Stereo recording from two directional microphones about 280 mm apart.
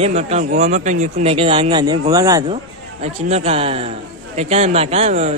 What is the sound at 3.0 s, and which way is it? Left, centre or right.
A man's voice, right.